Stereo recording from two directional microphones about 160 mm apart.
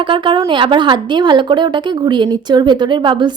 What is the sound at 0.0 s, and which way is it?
Speech, 30° right (ahead or behind).